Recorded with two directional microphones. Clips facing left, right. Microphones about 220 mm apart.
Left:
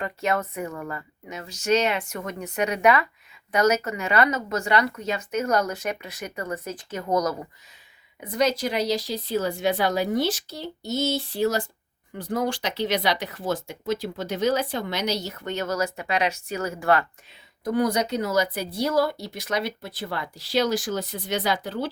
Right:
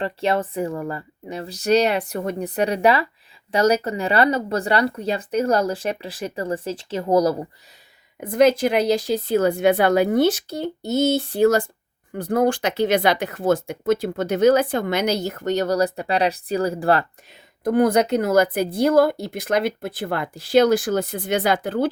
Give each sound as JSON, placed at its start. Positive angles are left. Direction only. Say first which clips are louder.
{"t": 0.0, "sound": "speech", "louder": "right 4 dB", "side_deg": -30}
{"t": 8.2, "sound": "speech", "louder": "right 7 dB", "side_deg": -50}
{"t": 17.6, "sound": "speech", "louder": "right 6 dB", "side_deg": -55}